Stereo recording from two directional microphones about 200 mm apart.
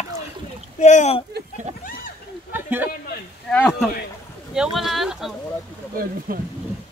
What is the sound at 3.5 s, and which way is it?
Speech, 5° left (ahead or behind).